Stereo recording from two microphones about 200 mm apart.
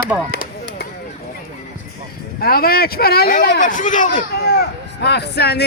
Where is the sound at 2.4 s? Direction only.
50° left (ahead or behind).